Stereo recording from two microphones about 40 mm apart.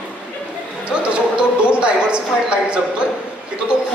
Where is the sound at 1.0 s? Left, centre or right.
Right.